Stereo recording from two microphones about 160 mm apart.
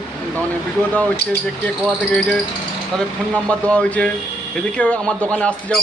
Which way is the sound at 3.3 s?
10° left (ahead or behind).